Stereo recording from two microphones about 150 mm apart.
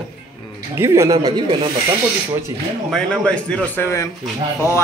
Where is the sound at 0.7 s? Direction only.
20° right (ahead or behind).